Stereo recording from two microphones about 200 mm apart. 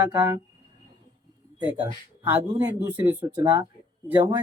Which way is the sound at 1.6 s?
5° right (ahead or behind).